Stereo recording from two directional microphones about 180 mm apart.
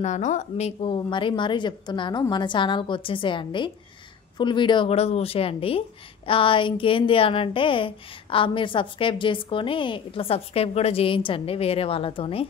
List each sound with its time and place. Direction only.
0.0 s speech: 40° left (ahead or behind)